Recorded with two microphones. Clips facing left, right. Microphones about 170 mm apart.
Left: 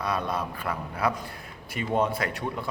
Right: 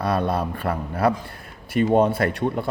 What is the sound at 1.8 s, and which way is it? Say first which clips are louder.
Speech: right 8 dB; 40° right (ahead or behind).